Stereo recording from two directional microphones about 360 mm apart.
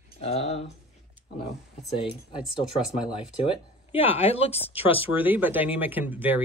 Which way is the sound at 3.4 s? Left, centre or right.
Centre.